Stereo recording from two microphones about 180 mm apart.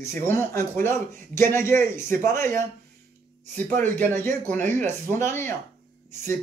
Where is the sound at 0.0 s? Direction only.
15° left (ahead or behind).